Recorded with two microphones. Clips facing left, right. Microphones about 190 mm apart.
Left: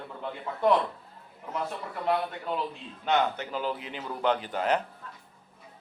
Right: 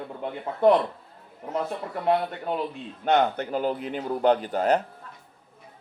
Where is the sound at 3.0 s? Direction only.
55° right (ahead or behind); by 4.8 s 40° right (ahead or behind).